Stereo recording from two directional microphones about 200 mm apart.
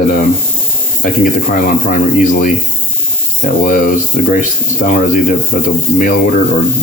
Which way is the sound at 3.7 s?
40° left (ahead or behind).